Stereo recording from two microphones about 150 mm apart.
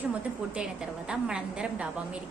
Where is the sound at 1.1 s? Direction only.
5° right (ahead or behind).